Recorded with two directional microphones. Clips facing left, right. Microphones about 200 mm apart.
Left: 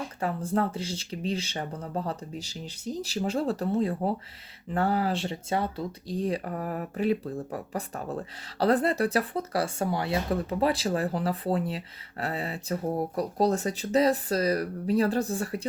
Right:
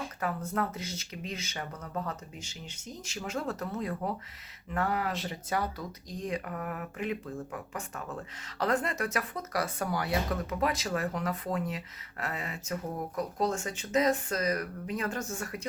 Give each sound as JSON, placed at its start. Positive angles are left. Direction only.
{"t": 0.2, "sound": "speech", "side_deg": 30}